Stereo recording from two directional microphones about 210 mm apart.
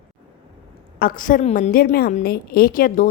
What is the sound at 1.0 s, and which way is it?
A woman's voice, 40° left (ahead or behind).